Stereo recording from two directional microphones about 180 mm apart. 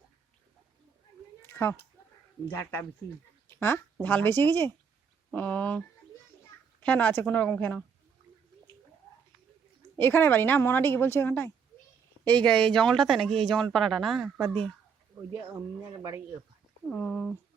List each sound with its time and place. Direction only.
1.4 s a sound: 10° left (ahead or behind)
2.5 s a woman's voice: 10° left (ahead or behind)
3.5 s a sound: 15° left (ahead or behind)
4.0 s a woman's voice: 10° left (ahead or behind)
6.8 s a woman's voice: 10° left (ahead or behind)
10.0 s a woman's voice: 10° left (ahead or behind)
15.3 s speech: 15° right (ahead or behind)
16.9 s a woman's voice: 10° left (ahead or behind)